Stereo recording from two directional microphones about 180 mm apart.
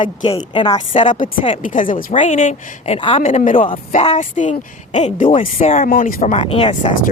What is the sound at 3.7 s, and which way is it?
Speech, 35° left (ahead or behind).